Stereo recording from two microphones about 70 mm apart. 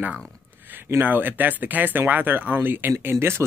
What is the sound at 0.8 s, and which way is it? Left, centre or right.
Speech, right.